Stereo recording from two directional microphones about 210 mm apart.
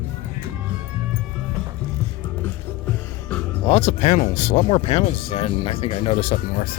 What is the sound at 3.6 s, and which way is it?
Speech, 30° left (ahead or behind).